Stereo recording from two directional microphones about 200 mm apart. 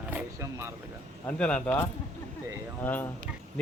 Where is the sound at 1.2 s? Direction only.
5° left (ahead or behind).